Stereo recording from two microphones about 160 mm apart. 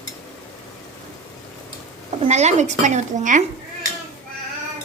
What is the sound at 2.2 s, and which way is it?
Speech, 45° right (ahead or behind).